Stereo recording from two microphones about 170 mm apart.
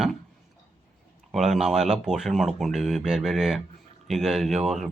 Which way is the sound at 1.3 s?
Centre (ahead or behind).